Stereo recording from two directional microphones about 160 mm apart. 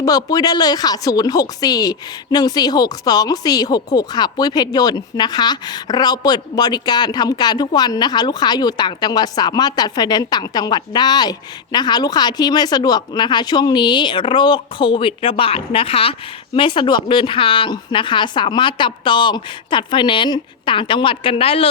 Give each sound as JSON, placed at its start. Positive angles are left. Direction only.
{"t": 0.0, "sound": "a woman's voice", "side_deg": 25}